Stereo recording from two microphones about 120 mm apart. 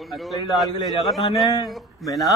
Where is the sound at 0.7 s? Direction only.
35° left (ahead or behind).